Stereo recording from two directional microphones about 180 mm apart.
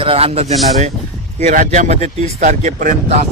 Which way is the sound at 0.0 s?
30° right (ahead or behind).